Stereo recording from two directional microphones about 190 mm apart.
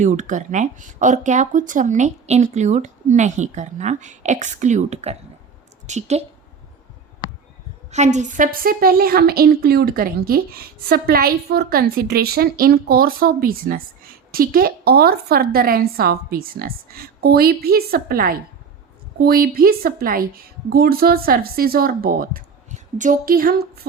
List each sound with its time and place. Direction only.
0.0 s a woman's voice: 40° right (ahead or behind)
7.9 s a woman's voice: 35° right (ahead or behind); by 23.8 s 55° right (ahead or behind)